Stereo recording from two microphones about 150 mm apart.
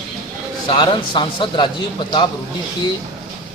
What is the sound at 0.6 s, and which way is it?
Speech, 30° left (ahead or behind).